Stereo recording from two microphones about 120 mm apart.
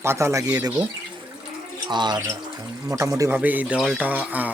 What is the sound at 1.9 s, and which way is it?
Speech, 35° right (ahead or behind).